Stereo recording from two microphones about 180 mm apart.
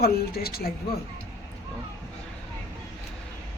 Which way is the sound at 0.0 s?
60° left (ahead or behind).